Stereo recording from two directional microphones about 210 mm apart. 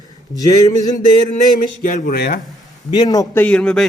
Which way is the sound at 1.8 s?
45° left (ahead or behind).